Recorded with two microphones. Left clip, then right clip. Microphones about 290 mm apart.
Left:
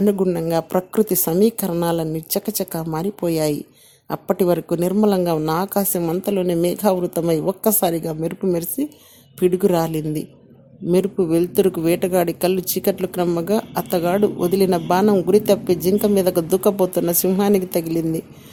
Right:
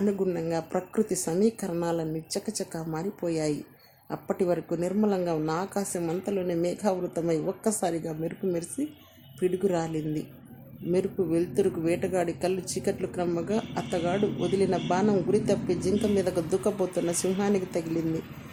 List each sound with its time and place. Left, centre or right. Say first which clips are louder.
0.0 s speech: left 9 dB; left